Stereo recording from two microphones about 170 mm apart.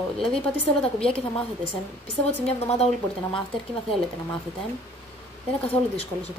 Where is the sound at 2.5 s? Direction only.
35° left (ahead or behind).